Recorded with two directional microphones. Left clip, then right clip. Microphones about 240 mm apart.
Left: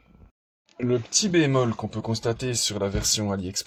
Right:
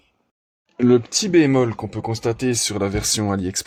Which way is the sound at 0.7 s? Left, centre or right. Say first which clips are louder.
Right 7 dB; right.